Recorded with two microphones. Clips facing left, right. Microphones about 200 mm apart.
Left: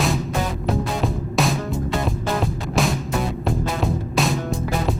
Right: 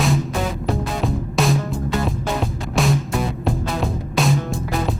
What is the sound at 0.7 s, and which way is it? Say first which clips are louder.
Music: left 1 dB; centre (ahead or behind).